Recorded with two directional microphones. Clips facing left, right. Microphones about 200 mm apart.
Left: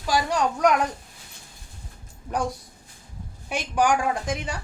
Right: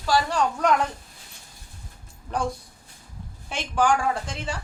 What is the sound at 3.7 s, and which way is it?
Speech, 15° left (ahead or behind).